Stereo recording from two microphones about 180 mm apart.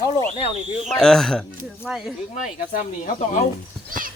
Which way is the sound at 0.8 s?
5° left (ahead or behind).